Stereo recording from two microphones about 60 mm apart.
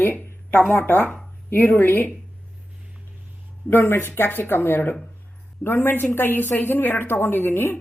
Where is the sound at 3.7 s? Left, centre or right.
Left.